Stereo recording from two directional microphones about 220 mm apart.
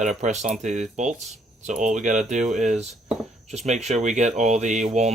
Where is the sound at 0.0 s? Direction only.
30° right (ahead or behind).